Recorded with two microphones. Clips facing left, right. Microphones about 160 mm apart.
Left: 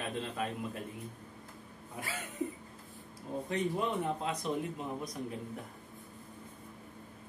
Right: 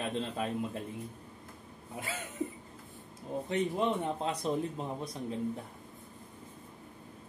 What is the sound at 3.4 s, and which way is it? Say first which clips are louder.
Speech: right 3 dB; 25° right (ahead or behind).